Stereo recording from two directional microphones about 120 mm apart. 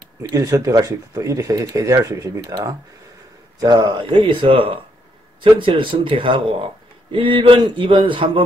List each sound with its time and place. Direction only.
0.2 s speech: 25° right (ahead or behind); by 8.3 s 45° right (ahead or behind)